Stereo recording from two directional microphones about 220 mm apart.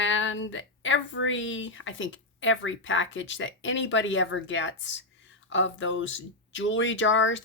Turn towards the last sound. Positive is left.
turn(degrees=60)  # may be behind; listen again after turning